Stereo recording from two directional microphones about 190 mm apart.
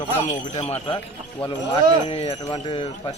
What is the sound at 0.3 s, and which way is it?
Speech, 35° left (ahead or behind).